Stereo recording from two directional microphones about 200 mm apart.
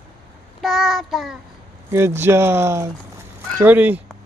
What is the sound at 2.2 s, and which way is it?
Speech, 10° right (ahead or behind).